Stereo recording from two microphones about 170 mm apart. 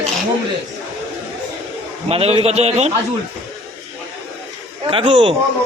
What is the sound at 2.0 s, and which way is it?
Speech, 35° right (ahead or behind).